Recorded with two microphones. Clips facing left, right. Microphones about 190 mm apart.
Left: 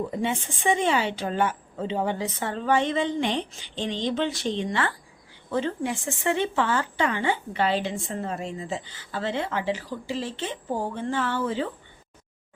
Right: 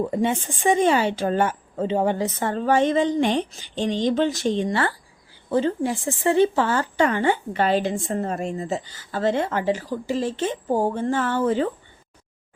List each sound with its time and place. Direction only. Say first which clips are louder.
0.1 s speech: right 5 dB; 45° right (ahead or behind)